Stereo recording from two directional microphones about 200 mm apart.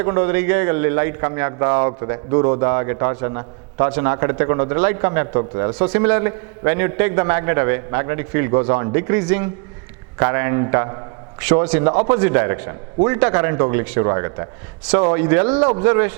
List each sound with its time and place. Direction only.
0.0 s a man's voice: 15° right (ahead or behind)